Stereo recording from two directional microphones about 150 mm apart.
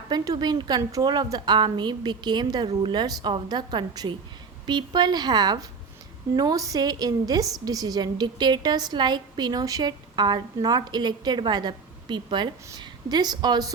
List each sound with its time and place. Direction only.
0.1 s a woman's voice: 30° right (ahead or behind)